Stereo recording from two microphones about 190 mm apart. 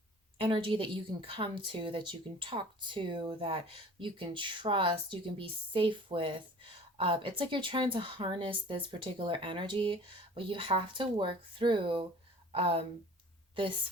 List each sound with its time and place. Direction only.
0.3 s a woman's voice: 30° right (ahead or behind)